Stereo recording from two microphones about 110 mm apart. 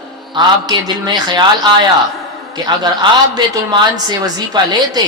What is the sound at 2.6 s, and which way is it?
A woman's voice, 40° right (ahead or behind).